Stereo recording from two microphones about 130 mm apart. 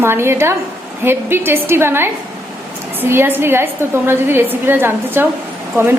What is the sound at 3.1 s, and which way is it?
A woman's voice, 15° right (ahead or behind).